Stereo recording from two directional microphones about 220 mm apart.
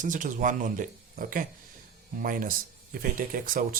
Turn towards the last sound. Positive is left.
turn(degrees=-40)  # may be behind; listen again after turning